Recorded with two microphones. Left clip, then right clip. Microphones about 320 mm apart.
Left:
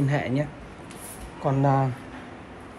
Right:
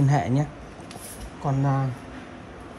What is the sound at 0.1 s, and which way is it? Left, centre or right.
Speech, centre.